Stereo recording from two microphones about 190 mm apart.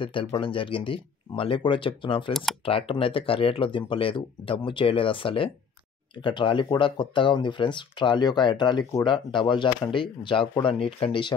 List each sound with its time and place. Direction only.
0.0 s speech: 25° left (ahead or behind)